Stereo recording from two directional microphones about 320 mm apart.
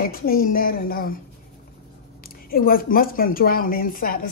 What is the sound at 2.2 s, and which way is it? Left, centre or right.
Speech, left.